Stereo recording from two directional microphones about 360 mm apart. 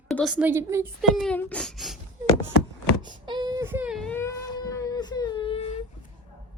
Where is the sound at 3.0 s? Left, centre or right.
Centre.